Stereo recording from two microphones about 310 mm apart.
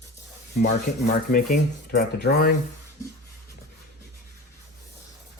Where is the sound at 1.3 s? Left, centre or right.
Left.